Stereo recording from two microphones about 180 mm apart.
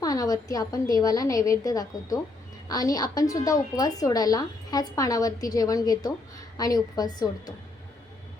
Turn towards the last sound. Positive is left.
turn(degrees=20)  # may be behind; listen again after turning